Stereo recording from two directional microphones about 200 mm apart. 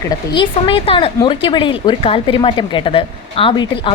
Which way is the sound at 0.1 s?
25° left (ahead or behind).